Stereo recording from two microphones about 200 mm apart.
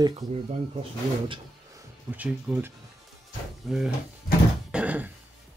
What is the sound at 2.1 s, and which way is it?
Speech, 10° right (ahead or behind).